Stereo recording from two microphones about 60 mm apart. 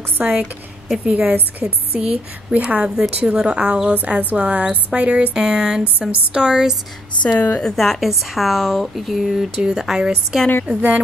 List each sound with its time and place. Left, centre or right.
0.4 s a woman's voice: centre
1.1 s a woman's voice: right
2.0 s speech: centre
4.2 s speech: right; by 6.8 s centre
7.2 s a woman's voice: left
7.6 s a woman's voice: centre; by 11.0 s right